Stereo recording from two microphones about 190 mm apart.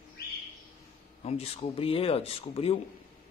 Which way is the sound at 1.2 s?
35° left (ahead or behind).